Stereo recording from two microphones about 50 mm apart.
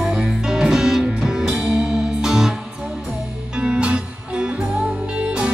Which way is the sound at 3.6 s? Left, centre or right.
Centre.